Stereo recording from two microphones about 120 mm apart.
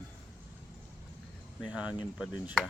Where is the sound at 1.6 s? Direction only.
10° right (ahead or behind).